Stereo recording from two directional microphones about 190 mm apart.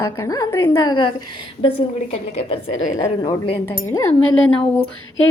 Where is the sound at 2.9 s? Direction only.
20° left (ahead or behind).